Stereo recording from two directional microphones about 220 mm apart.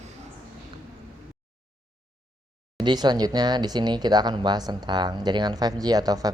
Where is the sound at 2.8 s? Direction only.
20° right (ahead or behind).